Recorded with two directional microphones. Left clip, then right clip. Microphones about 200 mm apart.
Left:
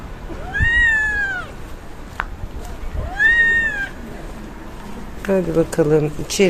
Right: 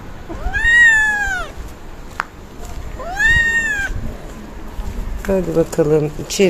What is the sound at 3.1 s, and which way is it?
Cat, 55° right (ahead or behind).